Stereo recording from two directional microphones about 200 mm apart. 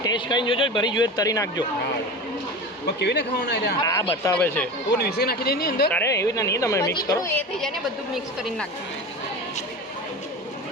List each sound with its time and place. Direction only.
0.0 s speech: 20° left (ahead or behind)
2.8 s speech: 55° left (ahead or behind)
3.8 s a woman's voice: 15° left (ahead or behind)
4.9 s speech: 55° left (ahead or behind)
5.9 s a woman's voice: 15° left (ahead or behind)